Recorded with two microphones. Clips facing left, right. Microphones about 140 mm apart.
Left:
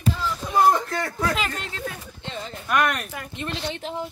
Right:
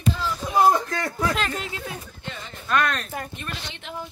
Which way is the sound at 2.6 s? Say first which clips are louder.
Left 1 dB; 15° left (ahead or behind).